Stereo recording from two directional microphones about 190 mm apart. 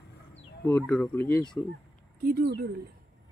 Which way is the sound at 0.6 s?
10° left (ahead or behind).